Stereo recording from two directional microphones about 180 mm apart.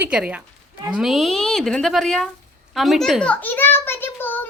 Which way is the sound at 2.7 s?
Centre (ahead or behind).